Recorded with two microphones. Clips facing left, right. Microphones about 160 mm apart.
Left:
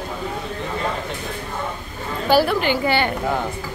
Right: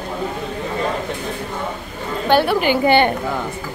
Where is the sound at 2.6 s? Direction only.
15° right (ahead or behind).